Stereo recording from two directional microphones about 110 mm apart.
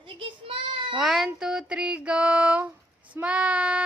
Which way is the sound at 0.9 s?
Centre (ahead or behind).